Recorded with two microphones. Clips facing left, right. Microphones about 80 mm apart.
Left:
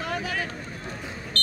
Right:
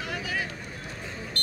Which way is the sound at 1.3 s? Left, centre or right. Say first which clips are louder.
Left 6 dB; centre.